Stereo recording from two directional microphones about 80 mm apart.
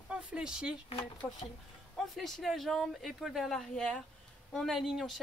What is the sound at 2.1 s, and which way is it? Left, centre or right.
Speech, centre.